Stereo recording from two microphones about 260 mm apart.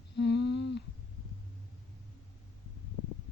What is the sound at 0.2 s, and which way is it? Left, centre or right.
Humming, left.